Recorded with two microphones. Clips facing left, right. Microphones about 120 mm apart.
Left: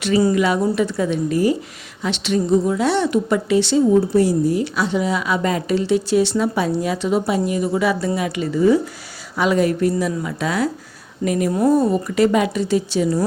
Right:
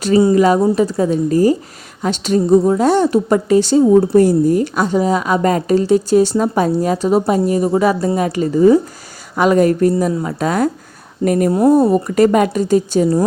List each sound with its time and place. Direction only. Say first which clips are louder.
0.3 s a woman's voice: right 6 dB; 40° right (ahead or behind)